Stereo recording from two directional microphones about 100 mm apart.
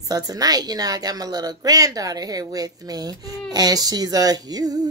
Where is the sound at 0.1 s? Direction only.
40° right (ahead or behind).